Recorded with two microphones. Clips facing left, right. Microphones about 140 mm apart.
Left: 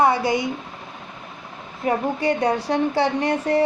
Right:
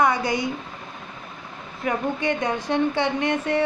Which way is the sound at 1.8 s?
35° left (ahead or behind).